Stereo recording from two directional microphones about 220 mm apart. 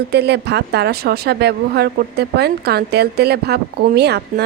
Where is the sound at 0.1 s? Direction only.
50° right (ahead or behind).